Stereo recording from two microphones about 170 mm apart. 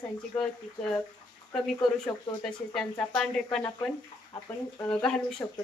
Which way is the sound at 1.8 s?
25° left (ahead or behind).